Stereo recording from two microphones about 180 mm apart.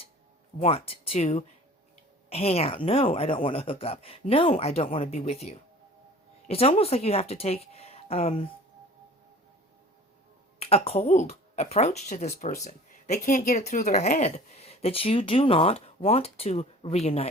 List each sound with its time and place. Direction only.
0.6 s speech: 35° left (ahead or behind)
10.6 s speech: 35° left (ahead or behind)
12.3 s speech: 50° left (ahead or behind); by 17.2 s 35° left (ahead or behind)